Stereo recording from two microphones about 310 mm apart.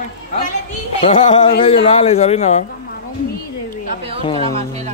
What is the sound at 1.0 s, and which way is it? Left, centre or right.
A man's voice, left.